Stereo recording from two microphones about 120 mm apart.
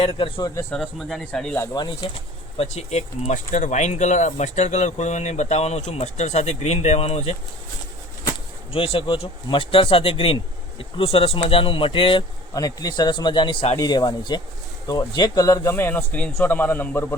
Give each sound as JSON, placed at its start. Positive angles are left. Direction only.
{"t": 0.0, "sound": "speech", "side_deg": 50}
{"t": 0.7, "sound": "speech", "side_deg": 5}
{"t": 1.7, "sound": "speech", "side_deg": 35}
{"t": 2.6, "sound": "speech", "side_deg": 65}
{"t": 8.7, "sound": "speech", "side_deg": 50}
{"t": 12.5, "sound": "speech", "side_deg": 30}
{"t": 13.7, "sound": "speech", "side_deg": 35}
{"t": 15.7, "sound": "a man's voice", "side_deg": 20}